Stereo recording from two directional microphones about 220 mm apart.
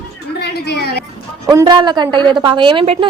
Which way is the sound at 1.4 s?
15° right (ahead or behind).